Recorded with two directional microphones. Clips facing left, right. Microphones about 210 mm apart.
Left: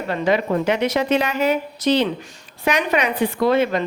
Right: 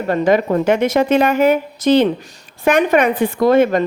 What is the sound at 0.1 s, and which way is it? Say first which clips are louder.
A woman's voice: right 5 dB; 45° right (ahead or behind).